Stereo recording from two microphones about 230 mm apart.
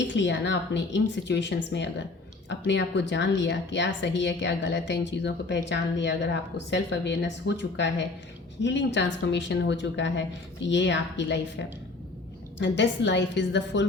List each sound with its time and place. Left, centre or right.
0.0 s a woman's voice: left